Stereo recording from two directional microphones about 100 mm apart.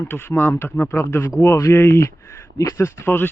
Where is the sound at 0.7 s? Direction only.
15° left (ahead or behind).